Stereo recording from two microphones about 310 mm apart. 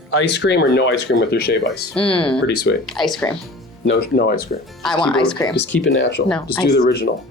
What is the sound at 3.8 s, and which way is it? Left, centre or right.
Speech, left.